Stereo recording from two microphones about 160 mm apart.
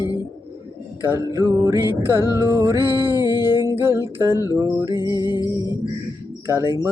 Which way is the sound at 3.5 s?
15° right (ahead or behind).